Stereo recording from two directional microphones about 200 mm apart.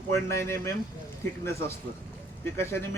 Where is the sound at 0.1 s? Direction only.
15° left (ahead or behind).